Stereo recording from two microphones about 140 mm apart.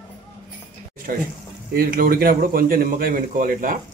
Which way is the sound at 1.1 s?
85° right.